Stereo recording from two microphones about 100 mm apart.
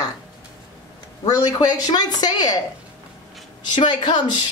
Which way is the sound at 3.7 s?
50° left (ahead or behind).